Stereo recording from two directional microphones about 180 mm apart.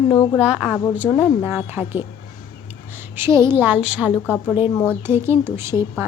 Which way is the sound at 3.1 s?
15° right (ahead or behind).